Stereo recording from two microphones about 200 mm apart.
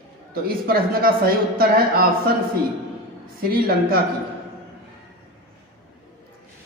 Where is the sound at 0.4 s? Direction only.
50° right (ahead or behind).